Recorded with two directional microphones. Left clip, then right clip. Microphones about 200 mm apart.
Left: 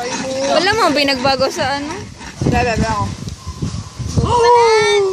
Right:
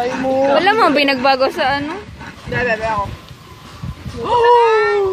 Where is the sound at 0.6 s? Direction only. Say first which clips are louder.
Right 1 dB; 5° left (ahead or behind).